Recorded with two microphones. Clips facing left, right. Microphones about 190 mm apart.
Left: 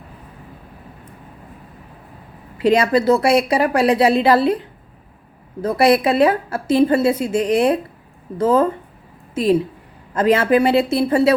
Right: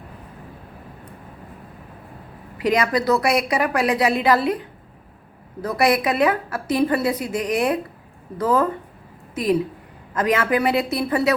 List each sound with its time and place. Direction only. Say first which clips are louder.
2.6 s a woman's voice: left 5 dB; 30° left (ahead or behind)
5.6 s a woman's voice: left 5 dB; 30° left (ahead or behind)